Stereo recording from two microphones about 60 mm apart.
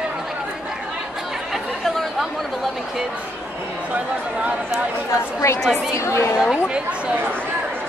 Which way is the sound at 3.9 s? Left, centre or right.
Right.